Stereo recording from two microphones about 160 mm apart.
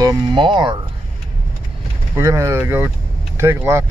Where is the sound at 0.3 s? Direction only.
30° right (ahead or behind).